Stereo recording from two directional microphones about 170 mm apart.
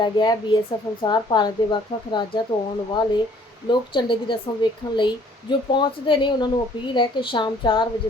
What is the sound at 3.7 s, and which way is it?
A woman's voice, 30° left (ahead or behind).